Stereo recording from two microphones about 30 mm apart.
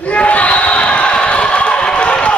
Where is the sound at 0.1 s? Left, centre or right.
Left.